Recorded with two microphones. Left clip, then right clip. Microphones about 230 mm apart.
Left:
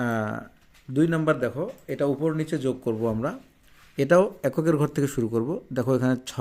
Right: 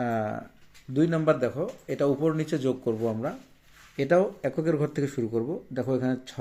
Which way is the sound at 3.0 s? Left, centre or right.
Left.